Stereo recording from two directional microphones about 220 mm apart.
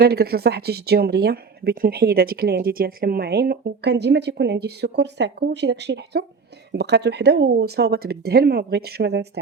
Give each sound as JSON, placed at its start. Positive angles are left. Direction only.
{"t": 0.0, "sound": "a woman's voice", "side_deg": -45}